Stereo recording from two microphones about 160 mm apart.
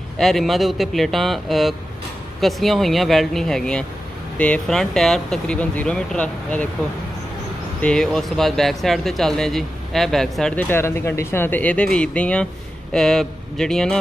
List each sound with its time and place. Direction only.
0.2 s speech: centre (ahead or behind)
7.8 s speech: 5° left (ahead or behind)